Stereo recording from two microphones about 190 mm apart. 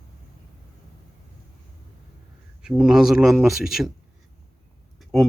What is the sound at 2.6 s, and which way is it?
Speech, 5° right (ahead or behind).